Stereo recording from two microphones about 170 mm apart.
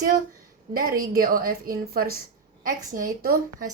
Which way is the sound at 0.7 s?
55° right (ahead or behind).